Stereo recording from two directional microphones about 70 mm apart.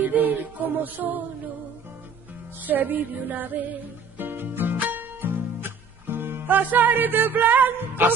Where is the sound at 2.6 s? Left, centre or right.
Right.